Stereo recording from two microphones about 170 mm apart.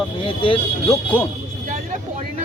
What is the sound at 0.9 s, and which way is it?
Speech, 10° left (ahead or behind).